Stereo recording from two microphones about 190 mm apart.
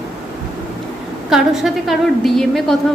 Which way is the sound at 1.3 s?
Centre (ahead or behind).